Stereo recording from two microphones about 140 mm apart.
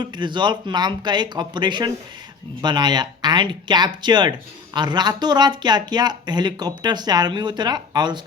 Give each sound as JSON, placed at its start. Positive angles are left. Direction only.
{"t": 0.0, "sound": "speech", "side_deg": -35}